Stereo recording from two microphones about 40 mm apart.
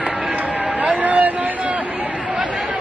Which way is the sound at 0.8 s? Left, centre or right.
Right.